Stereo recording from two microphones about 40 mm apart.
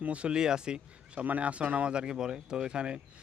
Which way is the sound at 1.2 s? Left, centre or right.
Right.